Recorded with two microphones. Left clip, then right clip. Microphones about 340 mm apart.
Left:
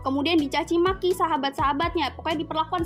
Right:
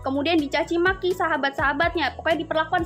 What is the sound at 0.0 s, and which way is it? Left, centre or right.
Speech, centre.